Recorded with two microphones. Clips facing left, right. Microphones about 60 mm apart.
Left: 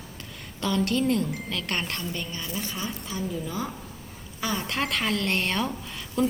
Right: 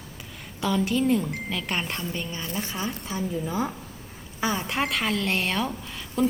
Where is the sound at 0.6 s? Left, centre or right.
Centre.